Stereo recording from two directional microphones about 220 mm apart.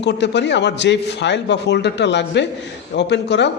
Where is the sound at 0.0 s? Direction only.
50° left (ahead or behind).